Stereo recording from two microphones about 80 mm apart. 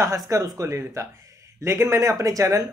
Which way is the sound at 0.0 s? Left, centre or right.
Right.